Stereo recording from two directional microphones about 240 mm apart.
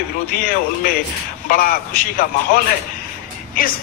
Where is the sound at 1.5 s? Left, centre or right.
Left.